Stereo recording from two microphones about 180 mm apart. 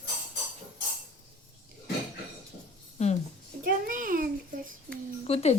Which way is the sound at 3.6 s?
50° right (ahead or behind).